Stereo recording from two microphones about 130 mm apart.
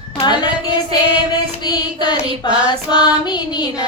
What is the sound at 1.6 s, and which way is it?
Child singing, 35° left (ahead or behind).